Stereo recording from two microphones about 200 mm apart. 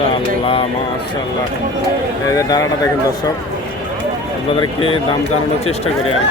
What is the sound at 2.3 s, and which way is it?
Speech, 20° left (ahead or behind).